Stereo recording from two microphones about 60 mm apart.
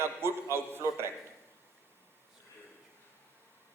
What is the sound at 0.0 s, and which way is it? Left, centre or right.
A man's voice, right.